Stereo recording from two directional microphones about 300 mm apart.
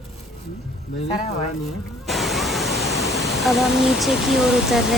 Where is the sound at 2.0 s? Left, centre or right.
Centre.